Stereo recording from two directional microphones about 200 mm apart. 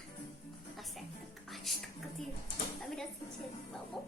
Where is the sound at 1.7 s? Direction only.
Centre (ahead or behind).